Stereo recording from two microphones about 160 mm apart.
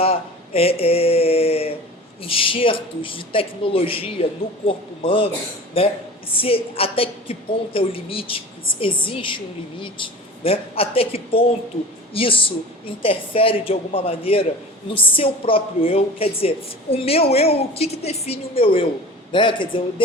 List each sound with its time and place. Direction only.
0.0 s speech: 35° left (ahead or behind)